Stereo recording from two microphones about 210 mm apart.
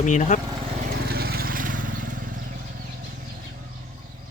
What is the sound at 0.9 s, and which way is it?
Vehicle, 45° right (ahead or behind).